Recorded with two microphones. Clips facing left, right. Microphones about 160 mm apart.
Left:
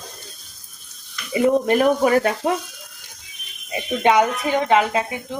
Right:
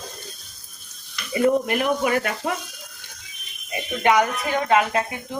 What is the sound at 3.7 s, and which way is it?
Speech, 25° left (ahead or behind).